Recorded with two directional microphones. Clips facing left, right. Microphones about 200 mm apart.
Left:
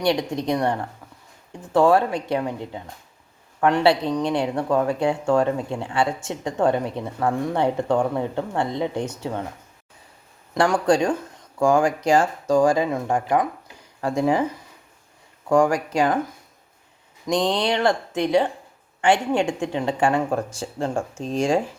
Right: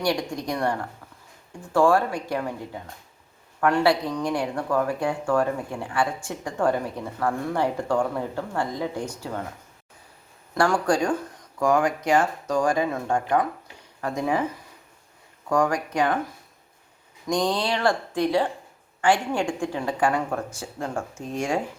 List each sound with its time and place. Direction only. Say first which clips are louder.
0.0 s speech: left 4 dB; 20° left (ahead or behind)
10.5 s speech: left 3 dB; 20° left (ahead or behind)
15.4 s speech: left 4 dB; 25° left (ahead or behind)
17.2 s speech: left 3 dB; 20° left (ahead or behind)